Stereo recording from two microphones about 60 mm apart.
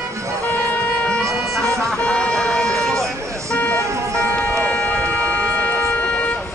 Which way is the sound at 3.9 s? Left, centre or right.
Right.